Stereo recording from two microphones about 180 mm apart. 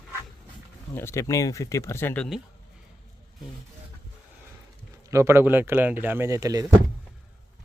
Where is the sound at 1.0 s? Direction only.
15° left (ahead or behind).